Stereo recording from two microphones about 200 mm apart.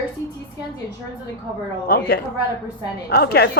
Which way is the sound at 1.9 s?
55° left (ahead or behind).